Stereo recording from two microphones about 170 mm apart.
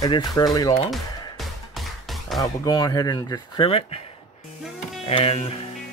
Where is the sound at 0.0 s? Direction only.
20° left (ahead or behind).